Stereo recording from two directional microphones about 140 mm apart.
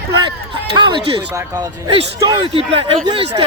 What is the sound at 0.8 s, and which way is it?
Speech, 35° right (ahead or behind).